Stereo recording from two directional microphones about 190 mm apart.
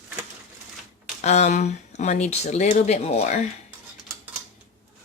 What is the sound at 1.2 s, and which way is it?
Speech, 35° left (ahead or behind).